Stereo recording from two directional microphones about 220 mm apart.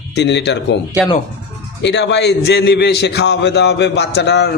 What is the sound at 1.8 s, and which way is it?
A man's voice, 55° left (ahead or behind).